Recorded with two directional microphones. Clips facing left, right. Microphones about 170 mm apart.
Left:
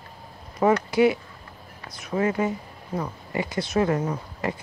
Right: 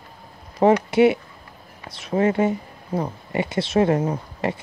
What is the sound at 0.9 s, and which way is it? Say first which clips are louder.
Speech: right 3 dB; 25° right (ahead or behind).